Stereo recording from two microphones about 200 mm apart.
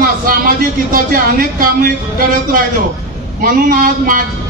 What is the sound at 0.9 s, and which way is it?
A man's voice, 45° right (ahead or behind).